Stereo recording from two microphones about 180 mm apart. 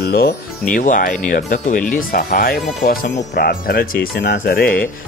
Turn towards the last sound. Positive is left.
turn(degrees=55)  # may be behind; listen again after turning